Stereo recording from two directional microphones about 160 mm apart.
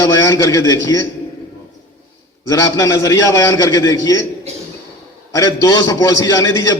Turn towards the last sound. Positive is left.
turn(degrees=20)  # may be behind; listen again after turning